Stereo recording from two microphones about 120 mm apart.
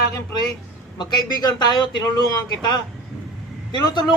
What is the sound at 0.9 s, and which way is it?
A man's voice, 35° left (ahead or behind).